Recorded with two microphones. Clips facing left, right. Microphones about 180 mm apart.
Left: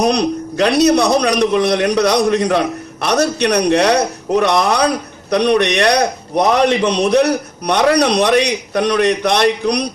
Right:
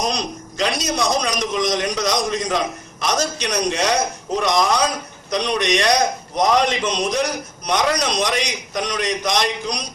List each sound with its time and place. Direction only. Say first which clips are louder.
0.0 s a man's voice: left 9 dB; 65° left (ahead or behind)